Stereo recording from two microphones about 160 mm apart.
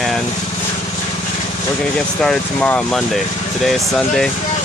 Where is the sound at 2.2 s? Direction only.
5° left (ahead or behind).